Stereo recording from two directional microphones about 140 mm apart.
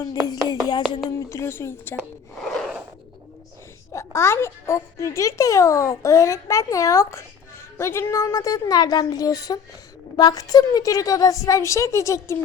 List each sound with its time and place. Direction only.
0.0 s a child's voice: 30° left (ahead or behind)
2.0 s a sound: centre (ahead or behind)
3.9 s a child's voice: 20° left (ahead or behind)